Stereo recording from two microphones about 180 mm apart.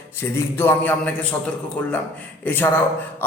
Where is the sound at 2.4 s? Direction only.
10° left (ahead or behind).